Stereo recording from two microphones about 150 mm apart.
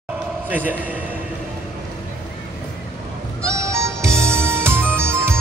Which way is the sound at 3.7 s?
20° right (ahead or behind).